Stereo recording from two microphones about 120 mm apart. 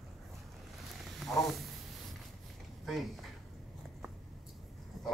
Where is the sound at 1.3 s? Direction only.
Centre (ahead or behind).